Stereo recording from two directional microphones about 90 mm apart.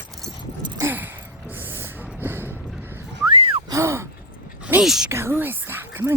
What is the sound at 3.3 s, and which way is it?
Gasp, 90° right.